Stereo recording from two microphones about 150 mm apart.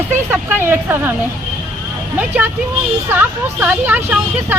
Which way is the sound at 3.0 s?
15° right (ahead or behind).